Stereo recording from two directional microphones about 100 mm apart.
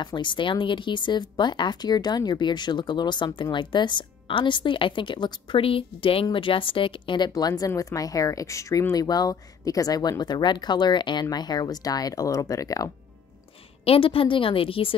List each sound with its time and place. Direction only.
0.0 s a woman's voice: 50° left (ahead or behind); by 12.9 s 35° left (ahead or behind)
13.8 s a woman's voice: 65° left (ahead or behind)